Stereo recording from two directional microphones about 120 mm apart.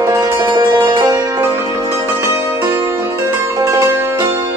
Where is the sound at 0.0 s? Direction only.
25° right (ahead or behind).